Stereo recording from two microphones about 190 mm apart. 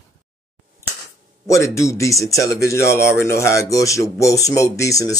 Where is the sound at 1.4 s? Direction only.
15° left (ahead or behind).